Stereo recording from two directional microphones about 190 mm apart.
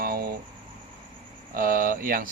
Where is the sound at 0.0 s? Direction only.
50° right (ahead or behind).